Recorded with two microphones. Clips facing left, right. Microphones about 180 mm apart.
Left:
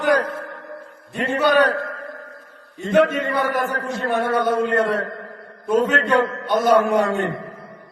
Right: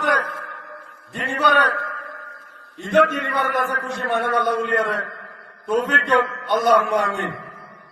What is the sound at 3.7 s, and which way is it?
A man's voice, 40° left (ahead or behind).